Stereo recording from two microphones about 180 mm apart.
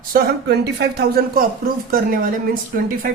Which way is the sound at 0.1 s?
55° right (ahead or behind).